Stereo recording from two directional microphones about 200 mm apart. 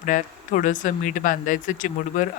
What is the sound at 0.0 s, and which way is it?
Speech, 40° left (ahead or behind).